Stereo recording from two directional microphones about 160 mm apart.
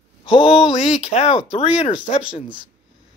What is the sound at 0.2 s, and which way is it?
Speech, 35° left (ahead or behind).